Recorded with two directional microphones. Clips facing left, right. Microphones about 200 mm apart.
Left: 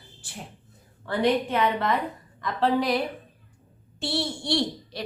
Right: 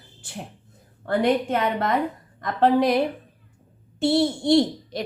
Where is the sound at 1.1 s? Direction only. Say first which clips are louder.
Right 3 dB; 50° right (ahead or behind).